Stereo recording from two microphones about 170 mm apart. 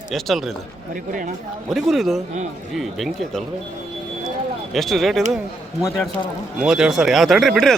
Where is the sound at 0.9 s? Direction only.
55° right (ahead or behind).